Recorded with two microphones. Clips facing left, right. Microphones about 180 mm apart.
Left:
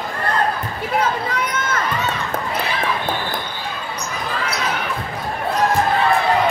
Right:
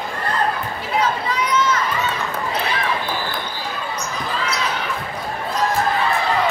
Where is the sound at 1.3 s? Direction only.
55° left (ahead or behind).